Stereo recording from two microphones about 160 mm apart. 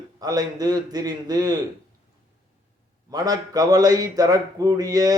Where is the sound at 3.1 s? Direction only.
25° right (ahead or behind).